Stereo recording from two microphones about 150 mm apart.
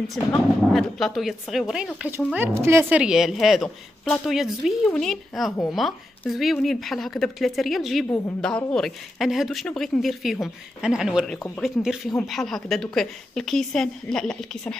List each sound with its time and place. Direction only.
0.3 s speech: centre (ahead or behind)
2.3 s speech: 15° right (ahead or behind)
11.3 s speech: 15° left (ahead or behind)
11.6 s speech: 5° right (ahead or behind)